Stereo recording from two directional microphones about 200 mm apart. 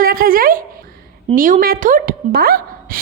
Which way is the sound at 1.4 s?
40° right (ahead or behind).